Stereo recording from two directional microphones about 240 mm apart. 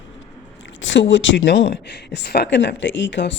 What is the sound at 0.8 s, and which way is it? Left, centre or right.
Speech, left.